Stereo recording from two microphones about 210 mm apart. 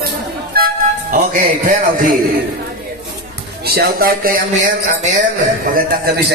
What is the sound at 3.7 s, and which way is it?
Speech, 45° right (ahead or behind).